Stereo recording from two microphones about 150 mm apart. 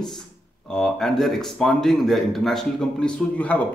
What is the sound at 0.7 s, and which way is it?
Speech, 5° left (ahead or behind).